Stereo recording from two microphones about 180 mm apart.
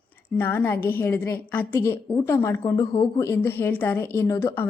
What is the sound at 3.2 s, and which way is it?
Speech, 15° left (ahead or behind).